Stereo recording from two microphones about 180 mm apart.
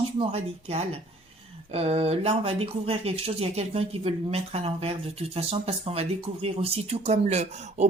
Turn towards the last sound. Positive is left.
turn(degrees=-40)  # may be behind; listen again after turning